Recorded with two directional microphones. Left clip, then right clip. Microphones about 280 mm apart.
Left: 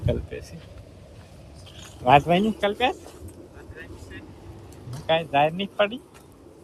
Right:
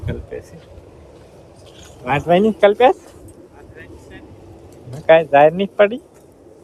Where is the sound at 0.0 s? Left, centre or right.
Centre.